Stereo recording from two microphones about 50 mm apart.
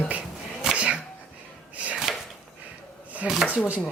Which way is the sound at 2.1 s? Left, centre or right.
Centre.